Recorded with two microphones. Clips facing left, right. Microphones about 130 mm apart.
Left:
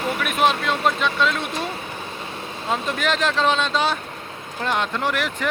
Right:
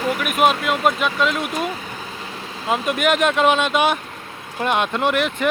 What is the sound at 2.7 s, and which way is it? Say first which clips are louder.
Speech: right 4 dB; 15° right (ahead or behind).